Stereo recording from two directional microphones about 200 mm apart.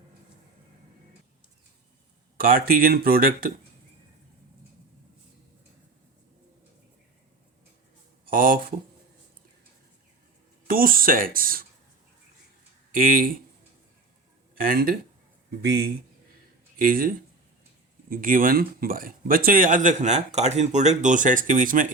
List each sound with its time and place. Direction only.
2.4 s speech: 45° right (ahead or behind)
8.3 s speech: 45° right (ahead or behind)
10.7 s speech: 45° right (ahead or behind)
12.9 s speech: 45° right (ahead or behind)
14.5 s speech: 45° right (ahead or behind)
16.7 s speech: 45° right (ahead or behind)